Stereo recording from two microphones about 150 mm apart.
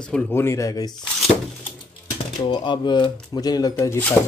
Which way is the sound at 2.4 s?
30° left (ahead or behind).